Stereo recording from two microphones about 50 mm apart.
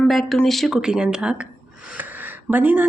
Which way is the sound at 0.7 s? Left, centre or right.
Centre.